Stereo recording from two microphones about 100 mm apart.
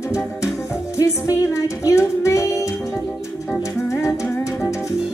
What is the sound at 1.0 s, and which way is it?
Music, 35° left (ahead or behind).